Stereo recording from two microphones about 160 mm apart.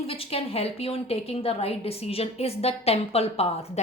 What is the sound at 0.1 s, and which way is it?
A woman's voice, 35° left (ahead or behind).